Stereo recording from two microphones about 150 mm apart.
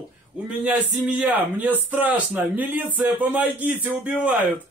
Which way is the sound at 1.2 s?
10° right (ahead or behind).